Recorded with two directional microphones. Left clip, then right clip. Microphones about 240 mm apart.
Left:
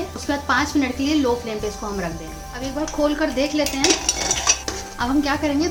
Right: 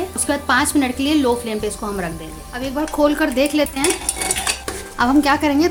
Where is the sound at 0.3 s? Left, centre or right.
Right.